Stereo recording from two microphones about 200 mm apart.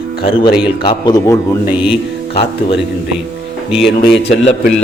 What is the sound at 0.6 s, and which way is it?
Speech, 25° left (ahead or behind).